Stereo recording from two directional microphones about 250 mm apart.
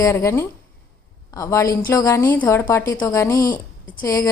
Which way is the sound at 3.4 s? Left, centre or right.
Left.